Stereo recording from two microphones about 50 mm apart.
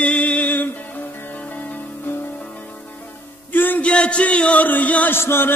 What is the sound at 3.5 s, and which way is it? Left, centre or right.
Music, left.